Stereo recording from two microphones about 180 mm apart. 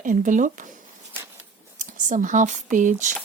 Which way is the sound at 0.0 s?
45° right (ahead or behind).